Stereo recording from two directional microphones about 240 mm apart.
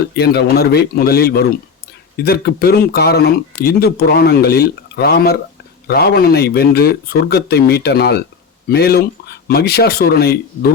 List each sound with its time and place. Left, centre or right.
0.2 s speech: left